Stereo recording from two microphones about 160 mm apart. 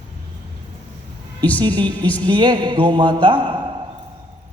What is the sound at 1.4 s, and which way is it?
Speech, 10° left (ahead or behind).